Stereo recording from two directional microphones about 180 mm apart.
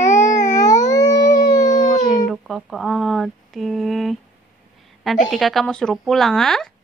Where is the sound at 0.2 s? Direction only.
20° left (ahead or behind).